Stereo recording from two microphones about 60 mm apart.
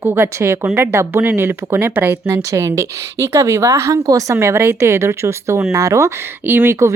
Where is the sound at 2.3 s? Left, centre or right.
Right.